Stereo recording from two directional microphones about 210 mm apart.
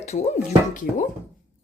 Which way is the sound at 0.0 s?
30° left (ahead or behind).